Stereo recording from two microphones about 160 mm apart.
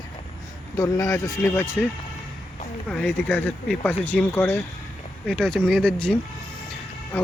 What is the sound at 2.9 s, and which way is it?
Speech, 10° left (ahead or behind).